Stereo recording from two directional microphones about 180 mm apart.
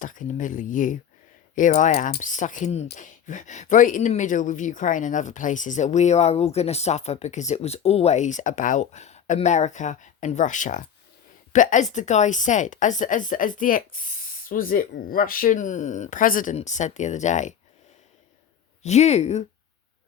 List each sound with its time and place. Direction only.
0.0 s a woman's voice: 45° left (ahead or behind)
18.8 s speech: 40° left (ahead or behind)